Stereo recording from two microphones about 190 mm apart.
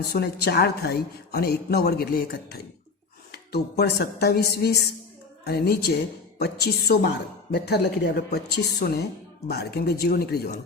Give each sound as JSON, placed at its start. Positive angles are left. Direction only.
{"t": 0.1, "sound": "a woman's voice", "side_deg": 55}